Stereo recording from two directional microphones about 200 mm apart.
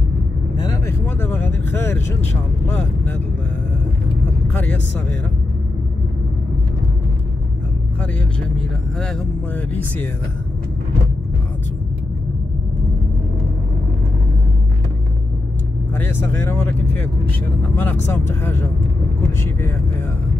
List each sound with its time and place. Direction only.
0.6 s vehicle: 15° left (ahead or behind)
8.5 s speech: 5° left (ahead or behind)
16.0 s speech: 10° left (ahead or behind)